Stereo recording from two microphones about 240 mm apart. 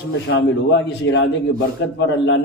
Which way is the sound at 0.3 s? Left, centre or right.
Left.